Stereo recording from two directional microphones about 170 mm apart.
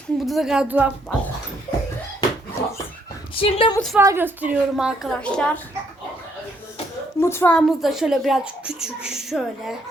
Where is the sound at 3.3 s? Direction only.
35° left (ahead or behind).